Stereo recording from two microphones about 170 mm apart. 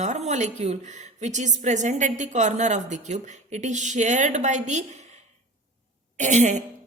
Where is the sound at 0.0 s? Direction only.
40° right (ahead or behind).